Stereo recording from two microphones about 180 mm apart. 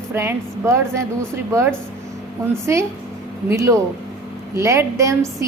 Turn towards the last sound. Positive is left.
turn(degrees=-15)  # may be behind; listen again after turning